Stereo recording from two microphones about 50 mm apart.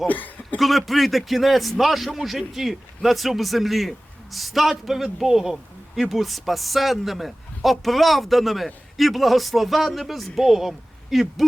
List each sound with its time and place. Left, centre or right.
0.1 s speech: left
0.6 s a man's voice: centre